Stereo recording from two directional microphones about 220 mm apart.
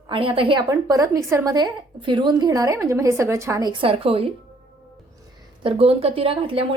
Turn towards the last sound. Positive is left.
turn(degrees=-25)  # may be behind; listen again after turning